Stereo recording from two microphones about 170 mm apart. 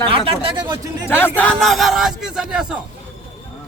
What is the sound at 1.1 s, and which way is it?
A man's voice, 15° left (ahead or behind).